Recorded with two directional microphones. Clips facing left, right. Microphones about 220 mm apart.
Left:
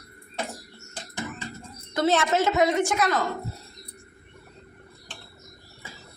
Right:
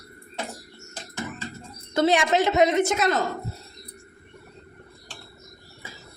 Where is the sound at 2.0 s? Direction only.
15° right (ahead or behind).